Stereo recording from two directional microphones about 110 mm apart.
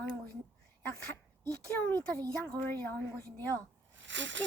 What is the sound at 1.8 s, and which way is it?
Speech, 20° left (ahead or behind).